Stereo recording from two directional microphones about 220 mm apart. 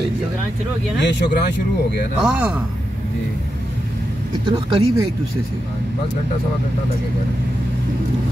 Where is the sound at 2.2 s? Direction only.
5° right (ahead or behind).